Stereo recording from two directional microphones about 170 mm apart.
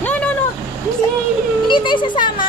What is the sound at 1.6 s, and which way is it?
Speech, 30° left (ahead or behind).